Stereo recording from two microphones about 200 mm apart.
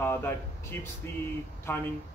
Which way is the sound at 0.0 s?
10° left (ahead or behind).